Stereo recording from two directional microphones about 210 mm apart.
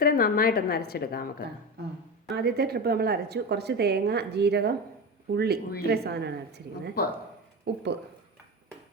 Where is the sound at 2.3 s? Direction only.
50° right (ahead or behind).